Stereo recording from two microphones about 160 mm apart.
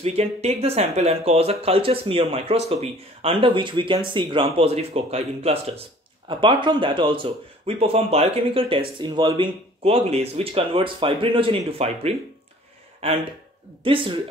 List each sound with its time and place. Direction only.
0.0 s speech: 40° right (ahead or behind)